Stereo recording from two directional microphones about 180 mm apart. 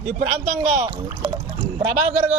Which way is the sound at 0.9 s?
20° right (ahead or behind).